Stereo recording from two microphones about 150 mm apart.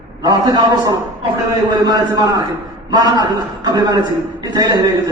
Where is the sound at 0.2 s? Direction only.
25° right (ahead or behind).